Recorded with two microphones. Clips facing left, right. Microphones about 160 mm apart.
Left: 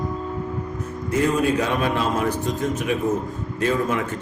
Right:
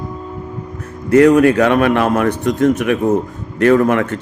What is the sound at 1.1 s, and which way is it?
A man's voice, 75° right (ahead or behind).